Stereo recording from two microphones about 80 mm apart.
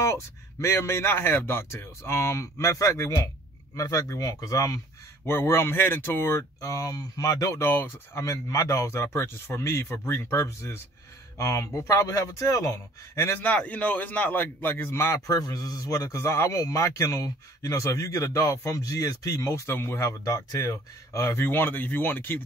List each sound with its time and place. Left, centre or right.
0.0 s a man's voice: left
5.2 s speech: left
7.6 s speech: left
13.4 s a man's voice: centre
15.1 s a man's voice: left
21.5 s a man's voice: left